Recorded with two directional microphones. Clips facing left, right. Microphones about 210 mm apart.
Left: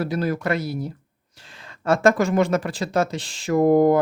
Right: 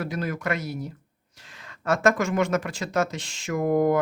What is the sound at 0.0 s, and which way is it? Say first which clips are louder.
Speech: left 5 dB; 35° left (ahead or behind).